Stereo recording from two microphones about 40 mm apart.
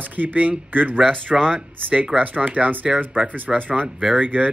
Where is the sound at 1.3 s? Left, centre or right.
Centre.